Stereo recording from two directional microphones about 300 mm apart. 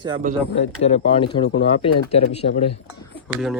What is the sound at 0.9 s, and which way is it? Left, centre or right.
Speech, centre.